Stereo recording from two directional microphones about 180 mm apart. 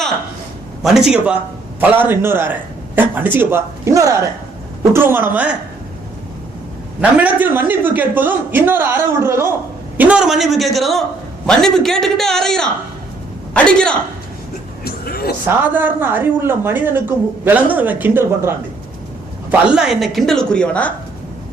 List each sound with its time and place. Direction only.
0.8 s a woman's voice: centre (ahead or behind)
7.0 s a woman's voice: 10° right (ahead or behind)
14.8 s vehicle: 55° left (ahead or behind)
15.4 s a woman's voice: 10° right (ahead or behind); by 20.9 s 5° left (ahead or behind)